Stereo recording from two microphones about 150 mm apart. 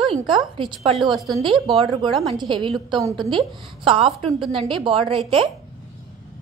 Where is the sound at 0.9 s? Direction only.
Centre (ahead or behind).